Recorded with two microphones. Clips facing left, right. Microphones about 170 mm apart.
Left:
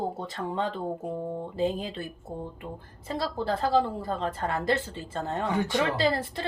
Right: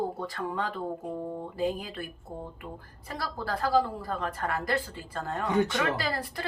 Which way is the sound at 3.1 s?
25° left (ahead or behind).